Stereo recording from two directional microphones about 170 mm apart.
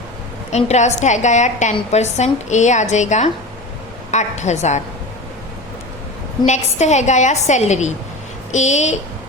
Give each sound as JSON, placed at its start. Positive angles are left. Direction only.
{"t": 0.5, "sound": "a woman's voice", "side_deg": 40}
{"t": 6.4, "sound": "a woman's voice", "side_deg": 45}